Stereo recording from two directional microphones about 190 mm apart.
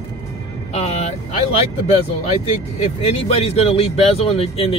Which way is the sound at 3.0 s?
30° left (ahead or behind).